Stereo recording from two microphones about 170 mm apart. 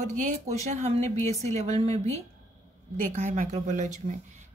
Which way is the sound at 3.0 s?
45° right (ahead or behind).